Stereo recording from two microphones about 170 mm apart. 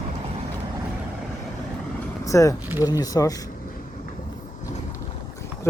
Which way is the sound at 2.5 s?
10° right (ahead or behind).